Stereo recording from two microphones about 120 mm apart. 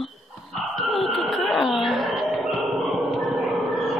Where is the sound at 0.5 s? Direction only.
Centre (ahead or behind).